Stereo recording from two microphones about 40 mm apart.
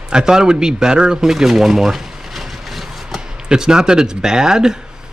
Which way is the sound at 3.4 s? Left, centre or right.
Centre.